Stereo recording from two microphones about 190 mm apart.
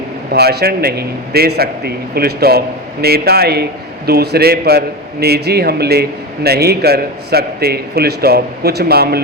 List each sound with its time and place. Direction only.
0.3 s a man's voice: 55° right (ahead or behind)